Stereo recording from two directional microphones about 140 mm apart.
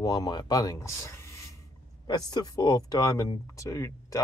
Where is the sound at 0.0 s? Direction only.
25° left (ahead or behind).